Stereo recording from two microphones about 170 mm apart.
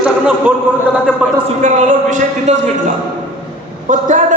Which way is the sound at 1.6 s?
45° right (ahead or behind).